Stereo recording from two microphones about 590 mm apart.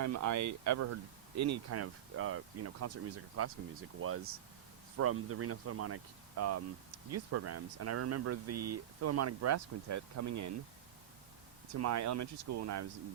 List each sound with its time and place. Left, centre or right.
0.0 s speech: right
11.8 s speech: right